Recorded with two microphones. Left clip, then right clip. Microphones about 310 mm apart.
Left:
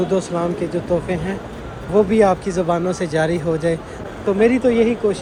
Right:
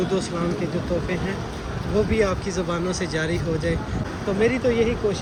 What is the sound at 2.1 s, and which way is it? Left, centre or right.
Speech, centre.